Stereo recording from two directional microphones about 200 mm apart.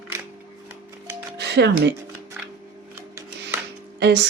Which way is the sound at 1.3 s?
55° right (ahead or behind).